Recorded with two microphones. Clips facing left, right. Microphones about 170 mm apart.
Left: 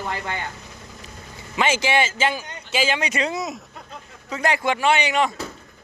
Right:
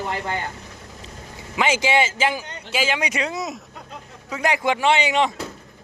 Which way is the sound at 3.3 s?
Centre (ahead or behind).